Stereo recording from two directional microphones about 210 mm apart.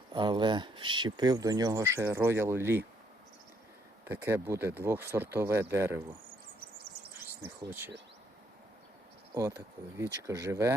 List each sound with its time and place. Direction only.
0.1 s speech: 20° right (ahead or behind)
4.0 s speech: 10° right (ahead or behind)
6.6 s insect: 50° right (ahead or behind)
7.6 s speech: 10° right (ahead or behind)
9.6 s speech: 15° right (ahead or behind)